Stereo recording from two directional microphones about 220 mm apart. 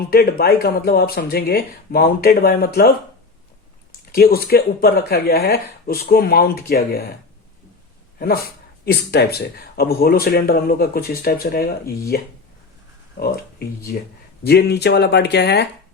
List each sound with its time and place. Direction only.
0.1 s speech: 45° left (ahead or behind)
4.1 s speech: 45° left (ahead or behind)
8.2 s speech: 45° left (ahead or behind)